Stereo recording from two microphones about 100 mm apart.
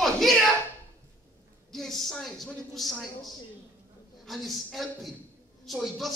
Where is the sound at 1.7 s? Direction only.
5° left (ahead or behind).